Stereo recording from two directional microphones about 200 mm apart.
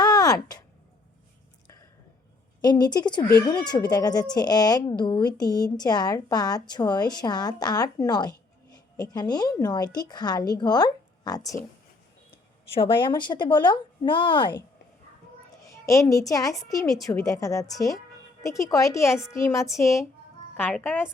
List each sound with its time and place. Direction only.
0.0 s a sound: 20° left (ahead or behind)
2.6 s speech: 20° left (ahead or behind)
12.7 s speech: 25° left (ahead or behind)
15.7 s a child's voice: 15° left (ahead or behind)